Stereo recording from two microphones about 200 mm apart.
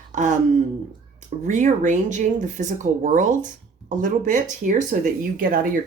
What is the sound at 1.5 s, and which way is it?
Speech, 35° right (ahead or behind).